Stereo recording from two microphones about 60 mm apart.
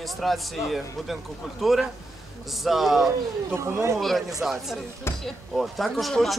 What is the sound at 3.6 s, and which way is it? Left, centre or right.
Speech, right.